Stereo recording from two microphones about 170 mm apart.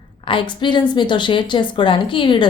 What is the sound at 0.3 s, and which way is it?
A woman's voice, 30° left (ahead or behind).